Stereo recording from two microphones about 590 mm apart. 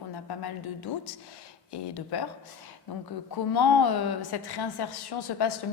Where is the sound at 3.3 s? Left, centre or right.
Left.